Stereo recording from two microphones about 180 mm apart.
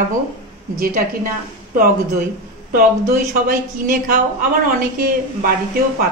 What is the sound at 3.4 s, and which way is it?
A woman's voice, 50° right (ahead or behind).